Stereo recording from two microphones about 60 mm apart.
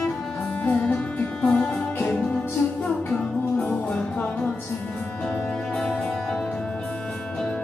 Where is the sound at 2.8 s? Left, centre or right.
Centre.